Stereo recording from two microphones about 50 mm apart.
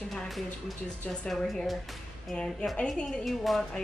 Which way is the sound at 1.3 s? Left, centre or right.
Centre.